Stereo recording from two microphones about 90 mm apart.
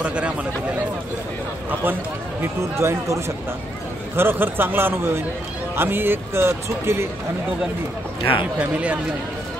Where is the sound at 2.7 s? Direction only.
30° right (ahead or behind).